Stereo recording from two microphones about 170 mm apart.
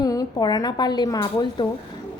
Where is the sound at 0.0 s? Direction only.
20° left (ahead or behind).